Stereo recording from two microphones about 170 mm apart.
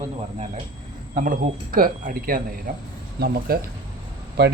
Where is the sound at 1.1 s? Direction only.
55° right (ahead or behind).